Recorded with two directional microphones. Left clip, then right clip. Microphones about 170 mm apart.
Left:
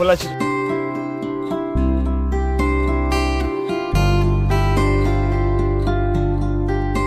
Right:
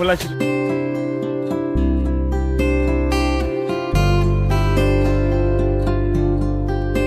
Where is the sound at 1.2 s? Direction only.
20° right (ahead or behind).